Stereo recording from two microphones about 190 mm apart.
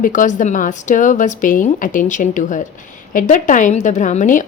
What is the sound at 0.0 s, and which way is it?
A woman's voice, 45° left (ahead or behind).